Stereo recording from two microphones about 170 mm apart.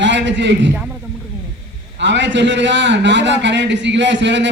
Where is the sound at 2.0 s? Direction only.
90° right.